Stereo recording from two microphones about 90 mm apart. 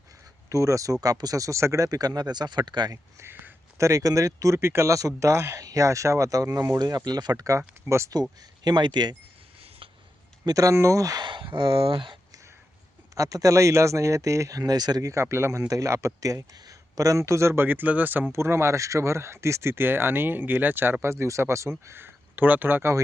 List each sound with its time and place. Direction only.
0.5 s speech: 35° right (ahead or behind); by 3.0 s 55° right (ahead or behind)
3.2 s speech: 25° right (ahead or behind)
8.6 s speech: 55° right (ahead or behind)
10.4 s speech: 40° right (ahead or behind)
11.3 s speech: 60° right (ahead or behind)
13.1 s speech: 40° right (ahead or behind)
15.1 s speech: 30° right (ahead or behind)